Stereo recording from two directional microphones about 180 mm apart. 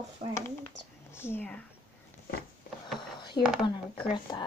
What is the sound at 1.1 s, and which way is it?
Speech, 10° left (ahead or behind).